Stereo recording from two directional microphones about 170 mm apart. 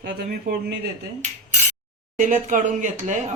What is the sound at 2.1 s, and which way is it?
Speech, 50° right (ahead or behind).